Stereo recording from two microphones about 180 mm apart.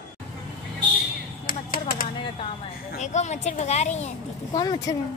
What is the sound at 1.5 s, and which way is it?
Speech, 50° left (ahead or behind).